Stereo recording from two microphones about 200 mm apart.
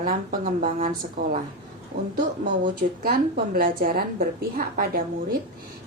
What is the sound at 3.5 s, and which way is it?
A woman's voice, 45° right (ahead or behind).